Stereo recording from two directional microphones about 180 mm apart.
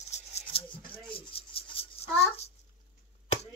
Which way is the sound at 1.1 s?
30° left (ahead or behind).